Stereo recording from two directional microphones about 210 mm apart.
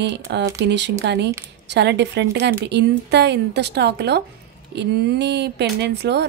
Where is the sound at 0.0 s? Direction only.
55° right (ahead or behind).